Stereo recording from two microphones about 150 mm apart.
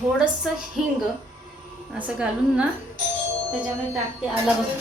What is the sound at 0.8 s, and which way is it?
A woman's voice, centre (ahead or behind).